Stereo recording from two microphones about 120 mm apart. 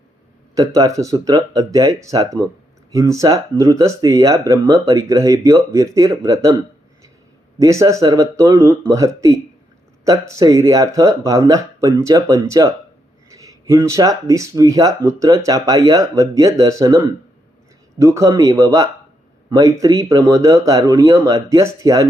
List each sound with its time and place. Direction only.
0.5 s speech: 30° right (ahead or behind)
7.6 s speech: 25° right (ahead or behind)
18.0 s speech: 25° right (ahead or behind)